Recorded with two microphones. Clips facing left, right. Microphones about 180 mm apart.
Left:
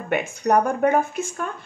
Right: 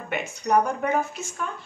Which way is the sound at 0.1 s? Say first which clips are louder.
Left 3 dB; 55° left (ahead or behind).